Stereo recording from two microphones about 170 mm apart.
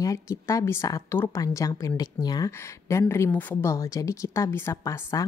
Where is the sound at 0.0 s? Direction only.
20° left (ahead or behind).